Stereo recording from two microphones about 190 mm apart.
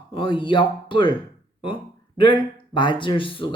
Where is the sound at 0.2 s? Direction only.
25° left (ahead or behind).